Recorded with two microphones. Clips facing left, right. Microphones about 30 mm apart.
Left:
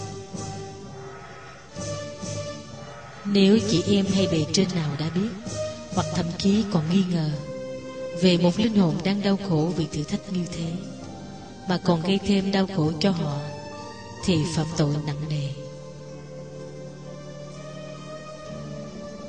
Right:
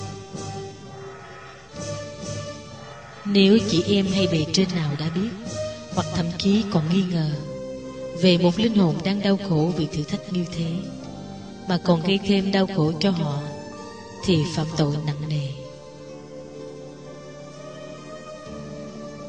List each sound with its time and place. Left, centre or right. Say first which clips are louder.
3.3 s a woman's voice: right 2 dB; centre
6.0 s speech: right 1 dB; centre
6.9 s a woman's voice: right 1 dB; centre